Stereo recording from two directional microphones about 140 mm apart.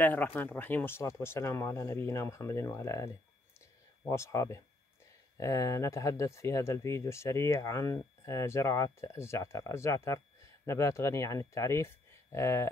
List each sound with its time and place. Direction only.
0.0 s speech: 15° left (ahead or behind)